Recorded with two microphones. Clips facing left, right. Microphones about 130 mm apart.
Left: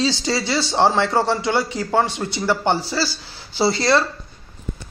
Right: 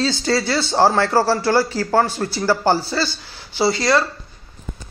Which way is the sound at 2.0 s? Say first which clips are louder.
Right 2 dB; 25° left (ahead or behind).